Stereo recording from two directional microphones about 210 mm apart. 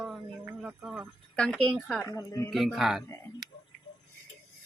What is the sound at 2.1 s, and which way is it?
Speech, 15° left (ahead or behind).